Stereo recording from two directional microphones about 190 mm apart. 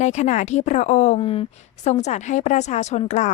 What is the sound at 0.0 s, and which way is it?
A woman's voice, 35° left (ahead or behind).